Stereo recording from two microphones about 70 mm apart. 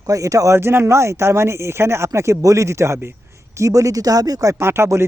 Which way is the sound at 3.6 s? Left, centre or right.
Right.